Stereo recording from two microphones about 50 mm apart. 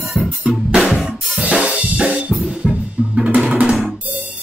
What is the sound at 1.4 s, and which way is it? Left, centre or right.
Drum kit, right.